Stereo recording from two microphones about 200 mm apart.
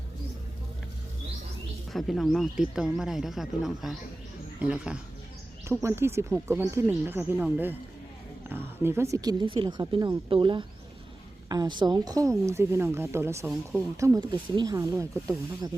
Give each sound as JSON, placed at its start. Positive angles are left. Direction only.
{"t": 1.9, "sound": "speech", "side_deg": 0}